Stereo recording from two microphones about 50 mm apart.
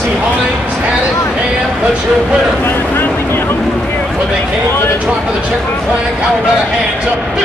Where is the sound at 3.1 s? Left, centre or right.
Left.